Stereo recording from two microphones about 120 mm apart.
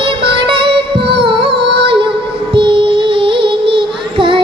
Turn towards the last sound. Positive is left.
turn(degrees=-45)  # may be behind; listen again after turning